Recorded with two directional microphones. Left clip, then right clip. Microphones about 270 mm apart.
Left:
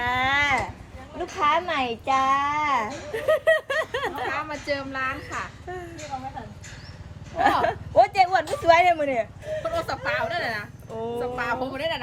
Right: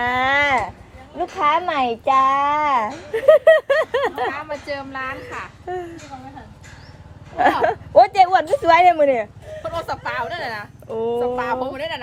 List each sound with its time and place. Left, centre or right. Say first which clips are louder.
0.0 s a sound: right 5 dB; right
1.2 s a child's voice: right 4 dB; right
4.3 s speech: right 1 dB; centre
5.7 s a child's voice: right 8 dB; right
7.6 s a child's voice: right 6 dB; right
9.6 s speech: right 2 dB; centre
10.9 s a child's voice: right 8 dB; right
11.2 s speech: right 6 dB; centre